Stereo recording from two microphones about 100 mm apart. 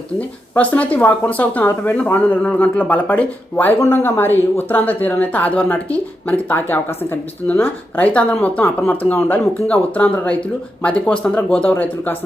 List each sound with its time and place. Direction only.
0.2 s speech: 15° left (ahead or behind)